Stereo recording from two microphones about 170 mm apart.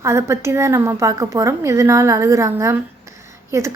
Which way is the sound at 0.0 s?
15° right (ahead or behind).